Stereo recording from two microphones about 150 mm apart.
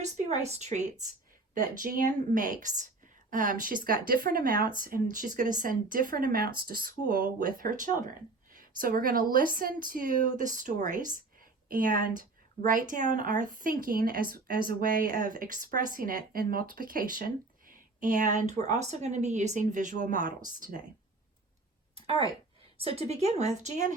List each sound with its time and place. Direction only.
0.0 s a woman's voice: 45° right (ahead or behind)
1.5 s speech: 70° right (ahead or behind)
21.9 s a sound: 40° right (ahead or behind)
22.8 s speech: 40° right (ahead or behind)